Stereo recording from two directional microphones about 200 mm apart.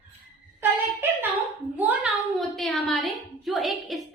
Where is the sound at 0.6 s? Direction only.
10° right (ahead or behind).